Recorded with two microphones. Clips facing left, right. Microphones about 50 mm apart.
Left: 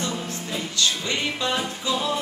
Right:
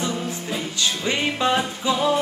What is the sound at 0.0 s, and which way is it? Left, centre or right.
Music, centre.